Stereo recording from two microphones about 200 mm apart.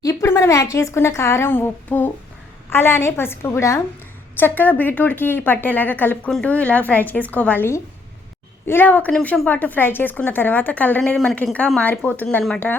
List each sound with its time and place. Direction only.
0.0 s a woman's voice: 15° left (ahead or behind)